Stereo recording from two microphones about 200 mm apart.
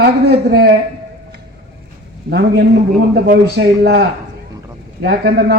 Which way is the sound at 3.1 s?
55° right (ahead or behind).